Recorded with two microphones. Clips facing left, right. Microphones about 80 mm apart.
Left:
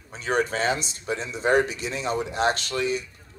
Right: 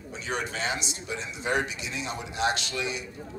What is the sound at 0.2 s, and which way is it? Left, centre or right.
Speech, left.